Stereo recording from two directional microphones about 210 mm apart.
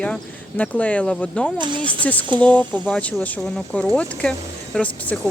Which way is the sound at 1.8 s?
5° left (ahead or behind).